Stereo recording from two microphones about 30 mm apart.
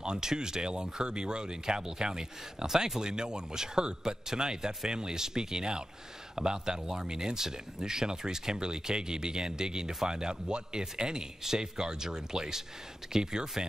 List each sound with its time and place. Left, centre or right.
0.0 s speech: right